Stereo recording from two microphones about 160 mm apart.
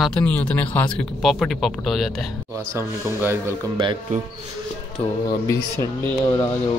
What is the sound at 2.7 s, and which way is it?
Speech, 15° right (ahead or behind).